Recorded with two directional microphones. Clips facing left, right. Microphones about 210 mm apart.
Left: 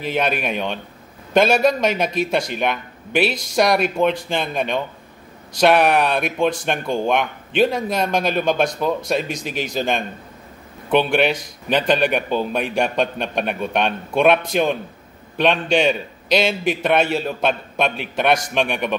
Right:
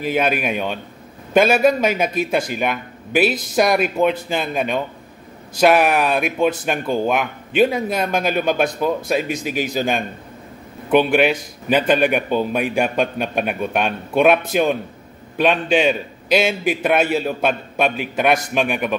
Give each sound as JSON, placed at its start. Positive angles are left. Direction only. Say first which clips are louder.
{"t": 0.0, "sound": "a man's voice", "louder": "right 2 dB", "side_deg": -5}
{"t": 3.3, "sound": "speech", "louder": "right 3 dB", "side_deg": -55}
{"t": 3.7, "sound": "a man's voice", "louder": "right 1 dB", "side_deg": -5}